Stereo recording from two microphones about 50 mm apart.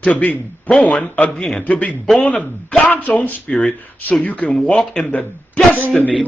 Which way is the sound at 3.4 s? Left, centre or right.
Centre.